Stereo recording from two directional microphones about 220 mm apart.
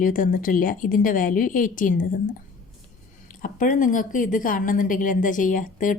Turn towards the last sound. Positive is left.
turn(degrees=35)  # may be behind; listen again after turning